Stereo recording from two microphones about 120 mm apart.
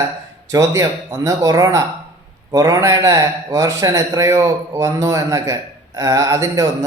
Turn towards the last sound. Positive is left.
turn(degrees=-25)  # may be behind; listen again after turning